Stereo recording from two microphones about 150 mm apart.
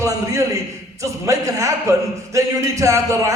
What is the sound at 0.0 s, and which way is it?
A man's voice, 20° right (ahead or behind).